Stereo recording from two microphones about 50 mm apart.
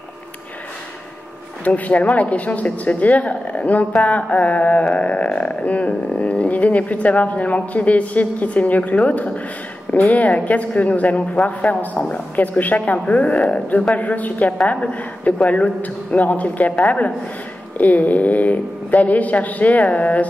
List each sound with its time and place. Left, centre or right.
1.6 s a woman's voice: left